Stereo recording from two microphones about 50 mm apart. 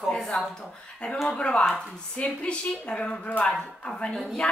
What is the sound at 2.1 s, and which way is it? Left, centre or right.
A woman's voice, left.